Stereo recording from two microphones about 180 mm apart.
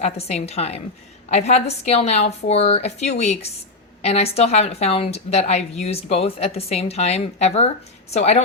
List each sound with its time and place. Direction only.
0.0 s speech: 35° left (ahead or behind)